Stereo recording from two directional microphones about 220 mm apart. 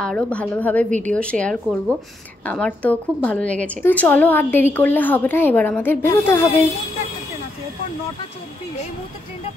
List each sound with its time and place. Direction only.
0.0 s a woman's voice: 5° left (ahead or behind)
0.8 s speech: 35° right (ahead or behind)
1.1 s a woman's voice: 5° left (ahead or behind)